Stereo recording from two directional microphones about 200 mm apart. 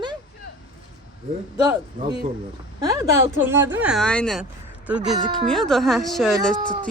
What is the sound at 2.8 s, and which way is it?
Speech, 15° right (ahead or behind).